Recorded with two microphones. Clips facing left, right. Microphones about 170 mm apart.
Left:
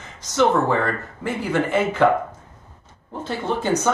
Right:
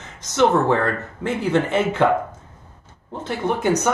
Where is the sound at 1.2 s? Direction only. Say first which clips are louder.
Right 3 dB; 20° right (ahead or behind).